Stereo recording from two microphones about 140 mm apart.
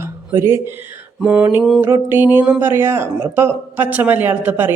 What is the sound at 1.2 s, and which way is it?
Speech, 10° right (ahead or behind).